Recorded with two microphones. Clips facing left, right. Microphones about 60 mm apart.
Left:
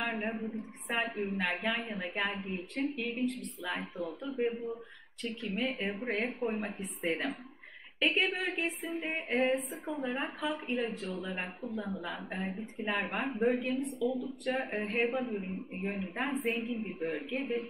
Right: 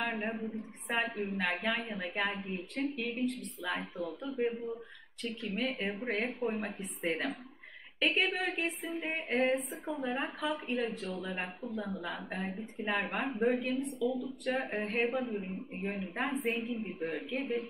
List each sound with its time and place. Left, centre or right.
0.0 s a woman's voice: centre
15.7 s a woman's voice: left
16.0 s a woman's voice: centre